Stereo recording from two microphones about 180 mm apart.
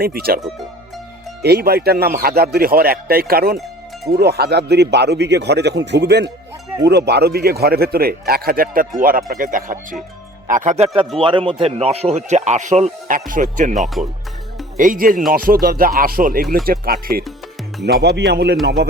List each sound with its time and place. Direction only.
0.0 s a man's voice: 55° right (ahead or behind)
1.4 s a man's voice: 60° right (ahead or behind); by 10.8 s 40° right (ahead or behind)
11.2 s speech: 30° right (ahead or behind); by 13.7 s 45° right (ahead or behind)
13.7 s speech: centre (ahead or behind)
14.8 s a man's voice: 50° right (ahead or behind)